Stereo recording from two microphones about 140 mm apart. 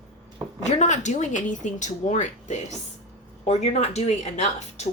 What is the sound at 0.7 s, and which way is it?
Speech, 55° left (ahead or behind).